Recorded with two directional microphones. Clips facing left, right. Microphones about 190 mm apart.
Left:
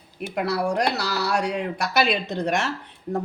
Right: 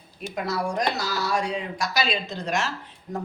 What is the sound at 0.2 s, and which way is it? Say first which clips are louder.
Speech: left 3 dB; 65° left (ahead or behind).